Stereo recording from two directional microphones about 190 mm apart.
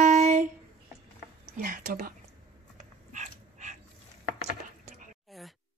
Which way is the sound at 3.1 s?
40° right (ahead or behind).